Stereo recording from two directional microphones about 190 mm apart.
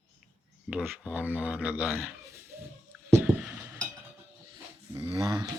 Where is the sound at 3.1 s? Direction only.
10° right (ahead or behind).